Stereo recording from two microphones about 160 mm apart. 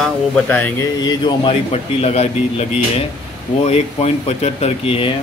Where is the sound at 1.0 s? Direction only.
30° left (ahead or behind).